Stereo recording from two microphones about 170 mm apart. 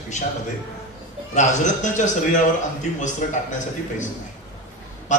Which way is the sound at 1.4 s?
45° left (ahead or behind).